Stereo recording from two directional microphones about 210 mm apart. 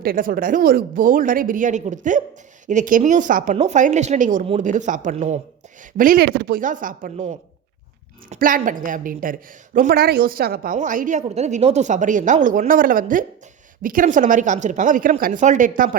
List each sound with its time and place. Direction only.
0.0 s a woman's voice: 45° right (ahead or behind)